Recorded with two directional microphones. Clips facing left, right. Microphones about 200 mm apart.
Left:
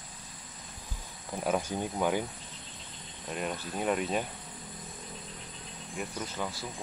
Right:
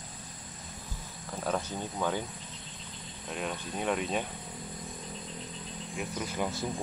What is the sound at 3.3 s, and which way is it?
Speech, 5° left (ahead or behind).